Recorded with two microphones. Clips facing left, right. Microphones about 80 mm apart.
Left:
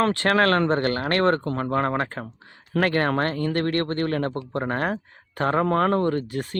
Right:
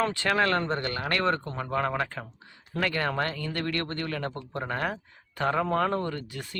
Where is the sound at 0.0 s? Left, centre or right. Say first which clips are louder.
Left 5 dB; left.